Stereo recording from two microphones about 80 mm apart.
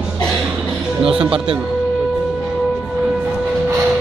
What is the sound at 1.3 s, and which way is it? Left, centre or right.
Speech, right.